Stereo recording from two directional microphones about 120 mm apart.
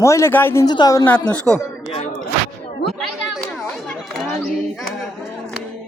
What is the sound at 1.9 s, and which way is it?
Speech, 65° left (ahead or behind).